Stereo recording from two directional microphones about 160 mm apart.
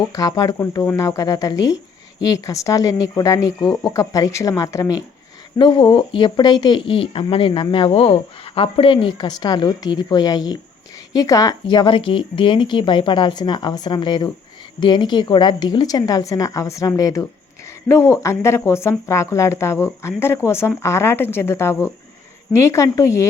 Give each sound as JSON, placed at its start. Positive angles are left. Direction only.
{"t": 0.1, "sound": "speech", "side_deg": 25}